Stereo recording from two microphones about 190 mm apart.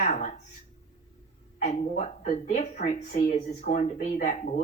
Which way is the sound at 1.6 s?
40° left (ahead or behind).